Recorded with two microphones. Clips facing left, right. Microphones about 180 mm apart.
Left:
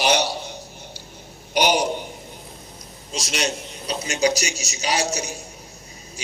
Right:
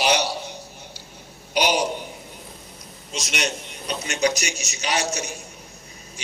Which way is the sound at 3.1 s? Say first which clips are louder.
Left 2 dB; 35° left (ahead or behind).